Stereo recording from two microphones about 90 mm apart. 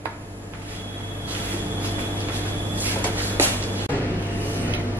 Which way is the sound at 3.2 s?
20° right (ahead or behind).